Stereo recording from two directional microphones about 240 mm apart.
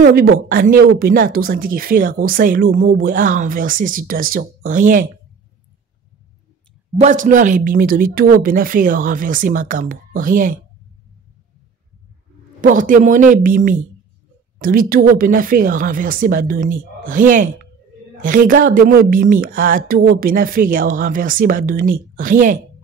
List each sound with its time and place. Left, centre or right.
0.0 s speech: right
7.0 s speech: right
12.6 s speech: right